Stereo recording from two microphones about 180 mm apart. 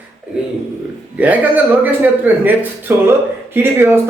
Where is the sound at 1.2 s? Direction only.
10° right (ahead or behind).